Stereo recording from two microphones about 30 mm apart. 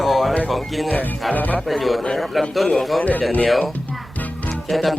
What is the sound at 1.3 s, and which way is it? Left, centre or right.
Speech, left.